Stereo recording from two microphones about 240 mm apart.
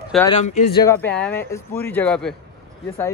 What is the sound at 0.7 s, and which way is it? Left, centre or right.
A man's voice, centre.